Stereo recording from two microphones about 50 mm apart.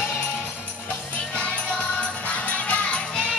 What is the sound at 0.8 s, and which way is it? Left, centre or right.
Music, left.